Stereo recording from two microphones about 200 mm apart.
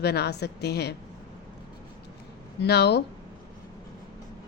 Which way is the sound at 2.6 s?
55° left (ahead or behind).